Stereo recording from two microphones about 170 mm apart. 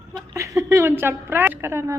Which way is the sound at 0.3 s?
20° right (ahead or behind).